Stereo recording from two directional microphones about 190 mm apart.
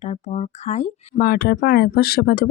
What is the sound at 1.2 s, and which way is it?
Speech, 55° left (ahead or behind).